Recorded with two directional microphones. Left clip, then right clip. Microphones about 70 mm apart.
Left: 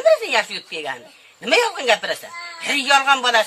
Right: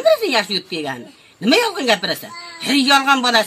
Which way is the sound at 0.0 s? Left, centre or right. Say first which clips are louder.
Right 1 dB; centre.